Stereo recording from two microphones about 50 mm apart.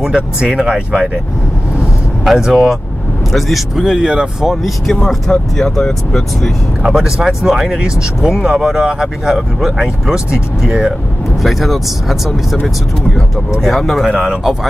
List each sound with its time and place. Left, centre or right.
0.5 s speech: centre
2.2 s speech: centre
3.8 s speech: centre
4.5 s speech: centre
6.8 s speech: centre
11.4 s speech: centre
13.6 s speech: centre
14.1 s speech: centre